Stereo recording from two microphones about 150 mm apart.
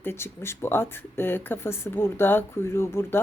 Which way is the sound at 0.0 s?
15° left (ahead or behind).